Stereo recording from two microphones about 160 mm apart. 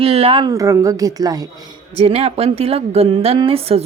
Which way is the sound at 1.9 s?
40° right (ahead or behind).